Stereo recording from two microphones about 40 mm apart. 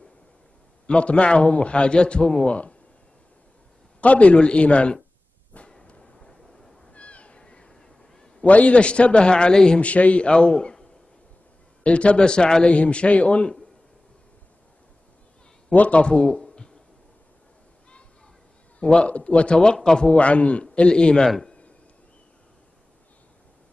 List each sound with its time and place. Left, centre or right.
0.8 s a man's voice: left
4.0 s a man's voice: left
6.0 s vehicle: centre
6.9 s a sound: left; by 8.5 s centre
8.5 s a man's voice: left
9.8 s a man's voice: left
12.6 s a man's voice: left
15.7 s a man's voice: left
18.8 s a man's voice: left
20.1 s a man's voice: left